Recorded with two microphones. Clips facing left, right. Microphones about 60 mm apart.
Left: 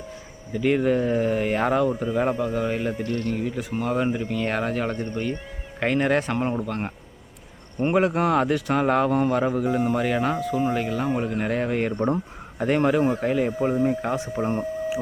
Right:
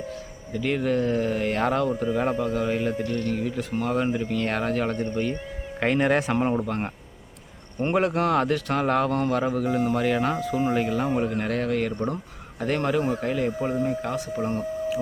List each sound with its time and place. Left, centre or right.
0.5 s speech: centre
11.4 s speech: centre
12.5 s speech: centre